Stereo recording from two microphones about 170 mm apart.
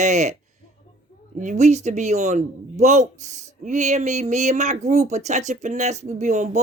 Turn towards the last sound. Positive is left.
turn(degrees=-45)  # may be behind; listen again after turning